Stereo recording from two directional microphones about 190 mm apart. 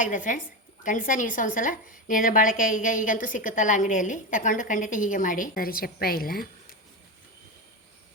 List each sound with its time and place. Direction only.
0.0 s a woman's voice: 45° left (ahead or behind)